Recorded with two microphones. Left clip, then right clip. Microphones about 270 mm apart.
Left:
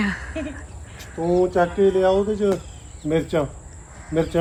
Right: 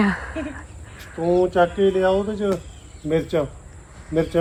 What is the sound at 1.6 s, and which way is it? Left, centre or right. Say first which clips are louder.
Speech: even; centre.